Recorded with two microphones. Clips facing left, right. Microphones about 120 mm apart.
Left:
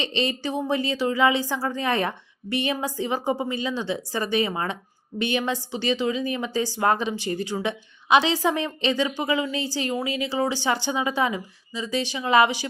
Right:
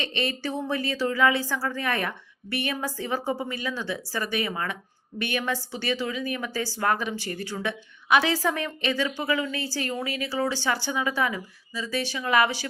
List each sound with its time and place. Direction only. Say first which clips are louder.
0.0 s a woman's voice: left 3 dB; 20° left (ahead or behind)